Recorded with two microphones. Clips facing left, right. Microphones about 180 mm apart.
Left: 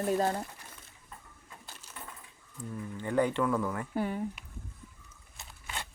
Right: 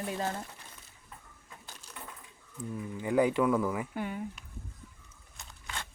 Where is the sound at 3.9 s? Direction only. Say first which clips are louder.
Left 4 dB; 40° left (ahead or behind).